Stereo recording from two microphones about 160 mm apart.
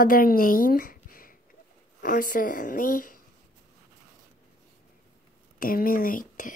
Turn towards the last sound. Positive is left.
turn(degrees=60)  # may be behind; listen again after turning